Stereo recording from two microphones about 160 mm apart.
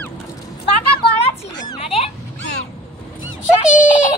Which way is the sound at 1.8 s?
40° left (ahead or behind).